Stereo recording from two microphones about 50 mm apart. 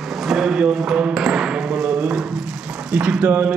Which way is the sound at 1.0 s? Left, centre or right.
Centre.